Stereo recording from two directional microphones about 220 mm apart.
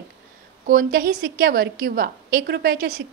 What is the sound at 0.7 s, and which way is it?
A woman's voice, 40° right (ahead or behind).